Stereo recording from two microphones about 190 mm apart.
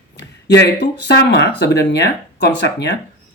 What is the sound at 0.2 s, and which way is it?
Speech, 60° left (ahead or behind).